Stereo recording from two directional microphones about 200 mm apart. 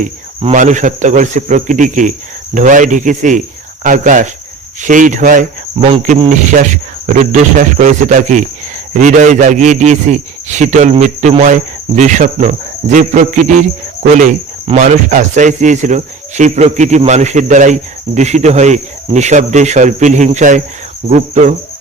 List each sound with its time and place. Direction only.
0.4 s speech: 40° right (ahead or behind)